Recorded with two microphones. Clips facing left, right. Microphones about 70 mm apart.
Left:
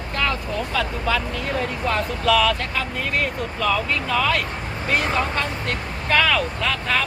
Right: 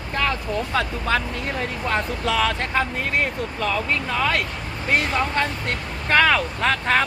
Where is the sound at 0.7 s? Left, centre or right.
Right.